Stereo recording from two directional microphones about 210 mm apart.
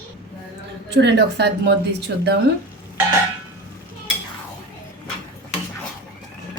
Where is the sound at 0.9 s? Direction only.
55° right (ahead or behind).